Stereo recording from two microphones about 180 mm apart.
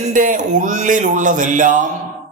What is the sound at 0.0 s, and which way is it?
Speech, 45° right (ahead or behind).